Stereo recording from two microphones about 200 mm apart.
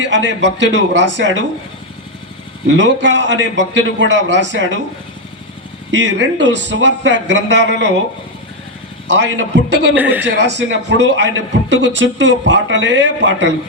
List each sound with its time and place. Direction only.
0.0 s a man's voice: 65° right (ahead or behind)
2.6 s a man's voice: 65° right (ahead or behind)
5.9 s a man's voice: 65° right (ahead or behind)
9.1 s a man's voice: 60° right (ahead or behind)